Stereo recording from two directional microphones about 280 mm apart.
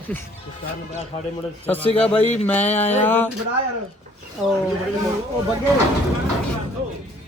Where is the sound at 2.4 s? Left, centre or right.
Centre.